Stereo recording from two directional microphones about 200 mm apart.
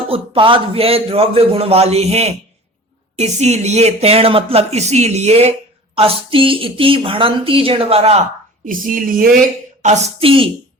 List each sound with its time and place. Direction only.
0.1 s speech: 25° right (ahead or behind)
8.6 s a woman's voice: 40° right (ahead or behind); by 10.5 s 25° right (ahead or behind)